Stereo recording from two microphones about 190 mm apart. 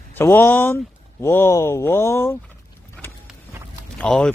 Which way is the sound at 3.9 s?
5° left (ahead or behind).